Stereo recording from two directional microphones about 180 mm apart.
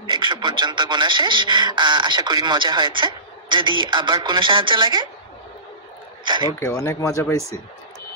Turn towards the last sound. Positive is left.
turn(degrees=15)  # may be behind; listen again after turning